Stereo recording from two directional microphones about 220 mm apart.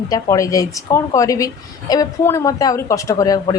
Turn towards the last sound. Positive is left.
turn(degrees=15)  # may be behind; listen again after turning